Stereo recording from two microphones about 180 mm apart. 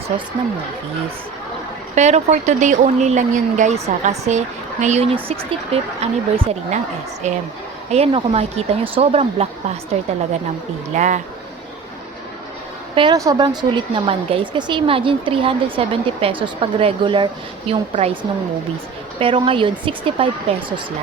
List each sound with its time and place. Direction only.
2.0 s speech: 40° right (ahead or behind)
13.0 s a woman's voice: 20° right (ahead or behind)